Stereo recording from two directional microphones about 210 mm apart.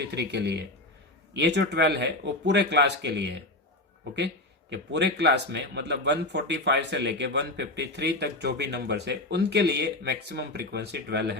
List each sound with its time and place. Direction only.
0.1 s a man's voice: 55° right (ahead or behind)
4.7 s speech: 55° right (ahead or behind)